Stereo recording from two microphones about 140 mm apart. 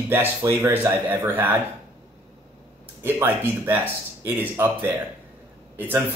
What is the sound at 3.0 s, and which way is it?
Speech, 15° right (ahead or behind).